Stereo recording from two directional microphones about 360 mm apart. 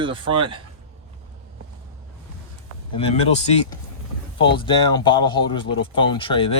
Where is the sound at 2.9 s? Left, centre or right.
Centre.